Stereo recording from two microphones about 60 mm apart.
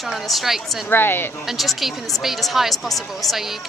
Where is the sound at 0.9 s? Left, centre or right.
Left.